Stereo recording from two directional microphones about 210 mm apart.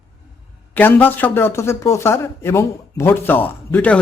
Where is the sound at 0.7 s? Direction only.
10° left (ahead or behind).